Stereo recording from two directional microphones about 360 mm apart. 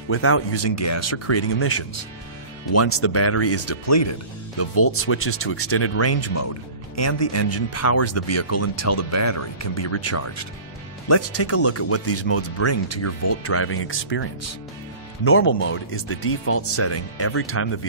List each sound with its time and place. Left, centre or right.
0.1 s speech: left
15.2 s speech: left